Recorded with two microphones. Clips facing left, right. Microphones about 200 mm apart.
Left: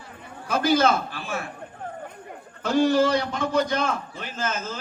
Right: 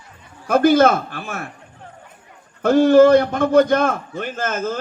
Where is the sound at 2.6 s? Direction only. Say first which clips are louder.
Right 9 dB; 55° right (ahead or behind).